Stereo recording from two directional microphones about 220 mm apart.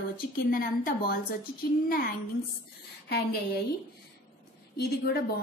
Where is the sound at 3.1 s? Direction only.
45° left (ahead or behind).